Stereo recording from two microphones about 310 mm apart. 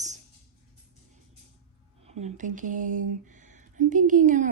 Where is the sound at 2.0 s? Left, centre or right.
Right.